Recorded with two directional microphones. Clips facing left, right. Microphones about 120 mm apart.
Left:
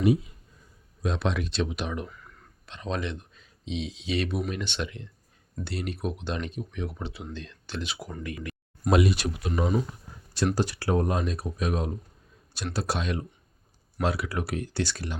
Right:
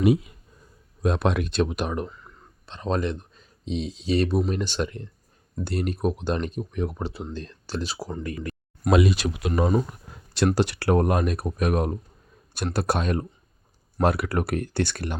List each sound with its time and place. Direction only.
0.0 s speech: 80° right
1.0 s speech: 50° right (ahead or behind)
2.0 s speech: 30° right (ahead or behind)
8.8 s speech: 90° right
9.5 s speech: 50° right (ahead or behind)
10.1 s speech: 70° right (ahead or behind); by 15.2 s 55° right (ahead or behind)